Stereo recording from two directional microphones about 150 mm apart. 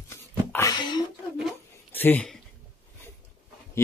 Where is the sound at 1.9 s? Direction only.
10° left (ahead or behind).